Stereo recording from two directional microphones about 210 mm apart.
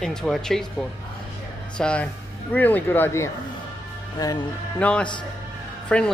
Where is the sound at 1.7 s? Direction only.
5° left (ahead or behind).